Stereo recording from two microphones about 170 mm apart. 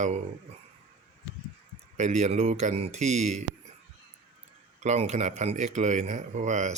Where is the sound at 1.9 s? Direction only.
40° right (ahead or behind).